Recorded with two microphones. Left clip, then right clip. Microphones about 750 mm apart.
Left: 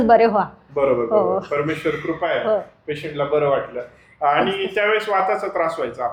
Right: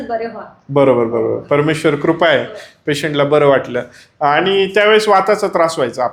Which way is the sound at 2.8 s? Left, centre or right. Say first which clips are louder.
Right 9 dB; right.